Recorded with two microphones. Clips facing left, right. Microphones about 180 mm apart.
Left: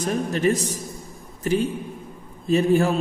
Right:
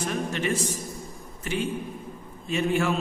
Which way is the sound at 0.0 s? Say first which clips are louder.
Left 6 dB; 40° left (ahead or behind).